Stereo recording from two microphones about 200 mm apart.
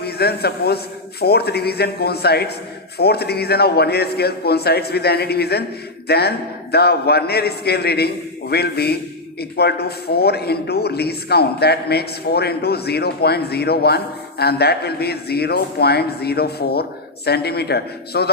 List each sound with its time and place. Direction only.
0.0 s a man's voice: 55° left (ahead or behind)